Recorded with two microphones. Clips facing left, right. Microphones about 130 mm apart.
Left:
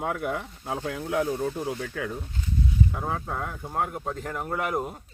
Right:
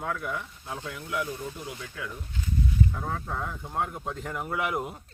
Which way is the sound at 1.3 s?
60° left (ahead or behind).